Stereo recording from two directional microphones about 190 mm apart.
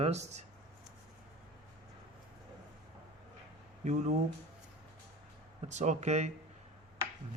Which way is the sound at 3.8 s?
40° right (ahead or behind).